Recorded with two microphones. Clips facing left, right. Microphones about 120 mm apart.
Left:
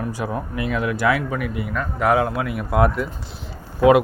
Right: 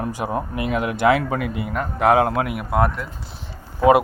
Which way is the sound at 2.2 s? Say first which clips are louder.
Right 3 dB; 50° right (ahead or behind).